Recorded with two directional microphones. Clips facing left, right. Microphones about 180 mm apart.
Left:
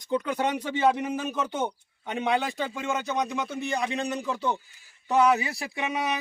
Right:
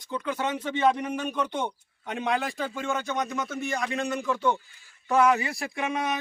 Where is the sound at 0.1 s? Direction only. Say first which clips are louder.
Left 3 dB; 15° left (ahead or behind).